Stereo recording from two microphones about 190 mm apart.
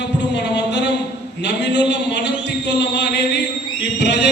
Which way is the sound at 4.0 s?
65° left (ahead or behind).